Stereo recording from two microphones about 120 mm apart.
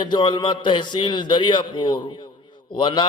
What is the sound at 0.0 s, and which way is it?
A man's voice, 40° left (ahead or behind).